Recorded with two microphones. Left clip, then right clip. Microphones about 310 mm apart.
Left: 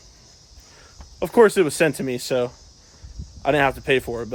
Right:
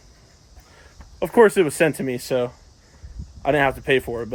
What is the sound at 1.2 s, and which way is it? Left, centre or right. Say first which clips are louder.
Speech: even; centre.